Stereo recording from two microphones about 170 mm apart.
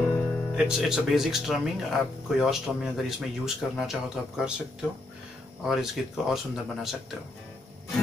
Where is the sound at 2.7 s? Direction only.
5° left (ahead or behind).